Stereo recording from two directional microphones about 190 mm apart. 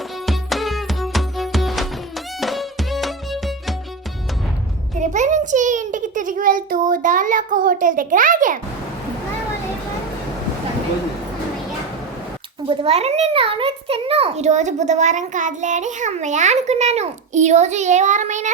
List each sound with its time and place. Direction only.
0.3 s music: centre (ahead or behind)
4.9 s a sound: 40° right (ahead or behind)
12.6 s a child's voice: 30° right (ahead or behind)